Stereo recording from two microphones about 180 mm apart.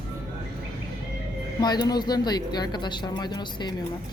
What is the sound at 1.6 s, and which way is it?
Speech, 25° left (ahead or behind).